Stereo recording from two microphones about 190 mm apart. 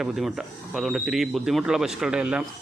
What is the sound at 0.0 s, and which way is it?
A man's voice, centre (ahead or behind).